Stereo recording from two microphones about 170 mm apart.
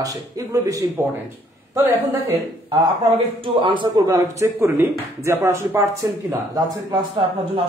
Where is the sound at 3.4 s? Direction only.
30° right (ahead or behind).